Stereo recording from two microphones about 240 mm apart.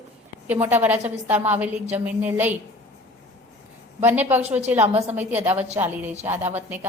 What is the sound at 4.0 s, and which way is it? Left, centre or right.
A woman's voice, centre.